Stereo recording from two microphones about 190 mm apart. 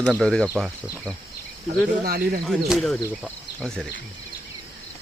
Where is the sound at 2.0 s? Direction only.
50° right (ahead or behind).